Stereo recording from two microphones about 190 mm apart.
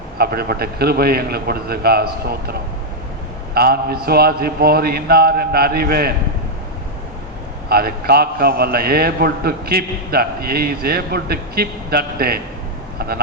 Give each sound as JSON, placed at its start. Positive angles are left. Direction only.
{"t": 0.2, "sound": "a man's voice", "side_deg": -50}
{"t": 7.7, "sound": "a man's voice", "side_deg": -55}